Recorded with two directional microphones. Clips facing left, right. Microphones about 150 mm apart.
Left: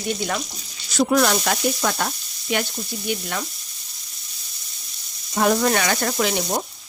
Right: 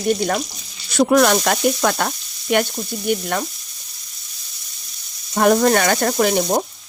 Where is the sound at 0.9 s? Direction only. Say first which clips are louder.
Right 4 dB; 60° right (ahead or behind).